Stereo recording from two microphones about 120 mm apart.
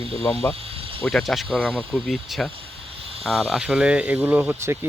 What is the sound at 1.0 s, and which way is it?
Speech, centre (ahead or behind).